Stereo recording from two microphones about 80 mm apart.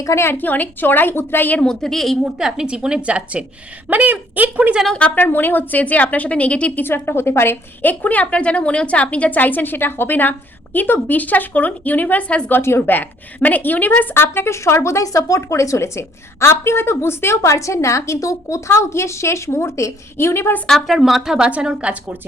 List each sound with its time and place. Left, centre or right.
0.0 s a woman's voice: left
1.6 s a woman's voice: centre
4.9 s a woman's voice: centre
6.8 s a woman's voice: left
20.7 s a woman's voice: centre